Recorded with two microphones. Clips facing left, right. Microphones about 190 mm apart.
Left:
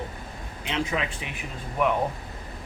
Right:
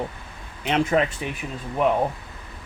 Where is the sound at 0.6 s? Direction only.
50° right (ahead or behind).